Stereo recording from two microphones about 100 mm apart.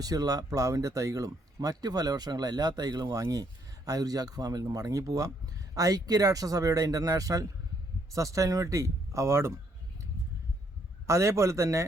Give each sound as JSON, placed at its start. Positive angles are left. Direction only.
{"t": 0.0, "sound": "speech", "side_deg": -40}
{"t": 11.0, "sound": "a man's voice", "side_deg": -30}